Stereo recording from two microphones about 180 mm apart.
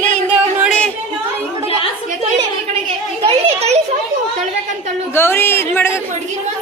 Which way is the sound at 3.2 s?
35° right (ahead or behind).